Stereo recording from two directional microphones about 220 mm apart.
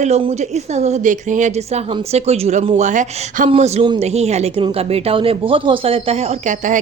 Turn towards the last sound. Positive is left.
turn(degrees=-35)  # may be behind; listen again after turning